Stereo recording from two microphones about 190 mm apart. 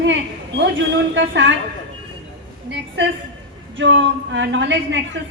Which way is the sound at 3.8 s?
75° right (ahead or behind).